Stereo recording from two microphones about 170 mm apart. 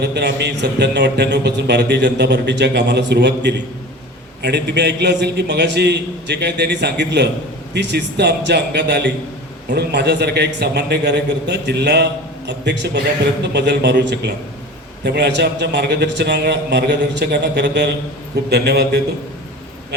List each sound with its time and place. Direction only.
0.0 s a man's voice: 80° right